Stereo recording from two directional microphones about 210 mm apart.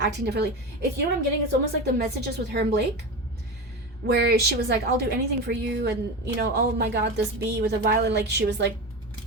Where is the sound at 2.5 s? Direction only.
50° right (ahead or behind).